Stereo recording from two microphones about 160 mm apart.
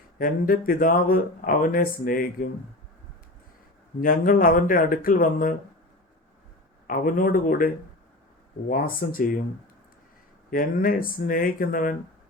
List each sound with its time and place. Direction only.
0.2 s speech: 60° left (ahead or behind)
4.0 s speech: 60° left (ahead or behind)
6.8 s speech: 60° left (ahead or behind)
8.7 s speech: 60° left (ahead or behind)
10.5 s speech: 65° left (ahead or behind)